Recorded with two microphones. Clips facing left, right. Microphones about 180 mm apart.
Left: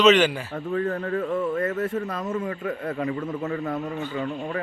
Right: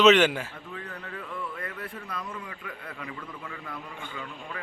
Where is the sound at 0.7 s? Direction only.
45° left (ahead or behind).